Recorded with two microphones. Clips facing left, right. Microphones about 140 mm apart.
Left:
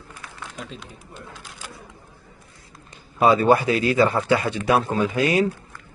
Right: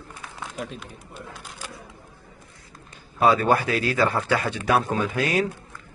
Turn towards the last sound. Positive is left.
turn(degrees=5)  # may be behind; listen again after turning